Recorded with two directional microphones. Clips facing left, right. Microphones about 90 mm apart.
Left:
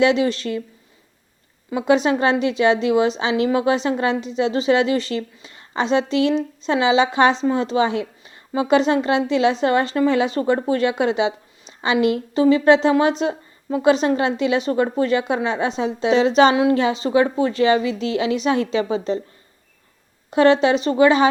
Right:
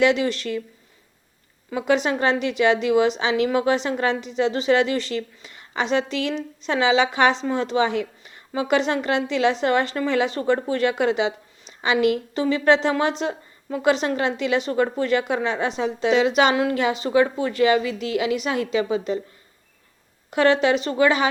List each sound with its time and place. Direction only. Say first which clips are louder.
0.0 s a woman's voice: left 2 dB; 20° left (ahead or behind)
1.7 s a woman's voice: left 4 dB; 20° left (ahead or behind)
16.1 s a woman's voice: left 4 dB; 35° left (ahead or behind)
20.3 s a woman's voice: left 3 dB; 25° left (ahead or behind)